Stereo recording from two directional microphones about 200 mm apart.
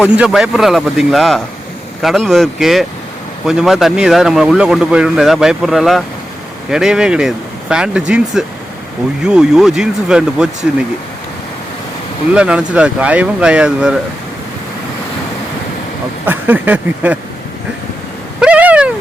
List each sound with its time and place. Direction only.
0.0 s a man's voice: 5° right (ahead or behind)
12.3 s a man's voice: 5° right (ahead or behind)
16.2 s speech: 10° right (ahead or behind)
18.3 s a sound: 5° right (ahead or behind)